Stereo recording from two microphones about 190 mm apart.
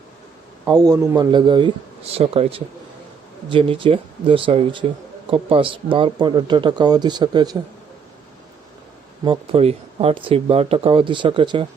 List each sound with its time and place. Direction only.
0.6 s speech: 20° right (ahead or behind)
9.2 s speech: 30° right (ahead or behind)